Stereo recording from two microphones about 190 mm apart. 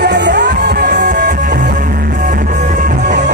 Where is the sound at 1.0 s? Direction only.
45° right (ahead or behind).